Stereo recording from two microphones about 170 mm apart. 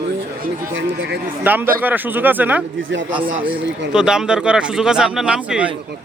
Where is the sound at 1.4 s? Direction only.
10° right (ahead or behind).